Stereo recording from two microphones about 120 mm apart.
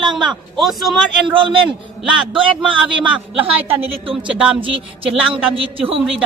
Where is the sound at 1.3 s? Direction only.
45° right (ahead or behind).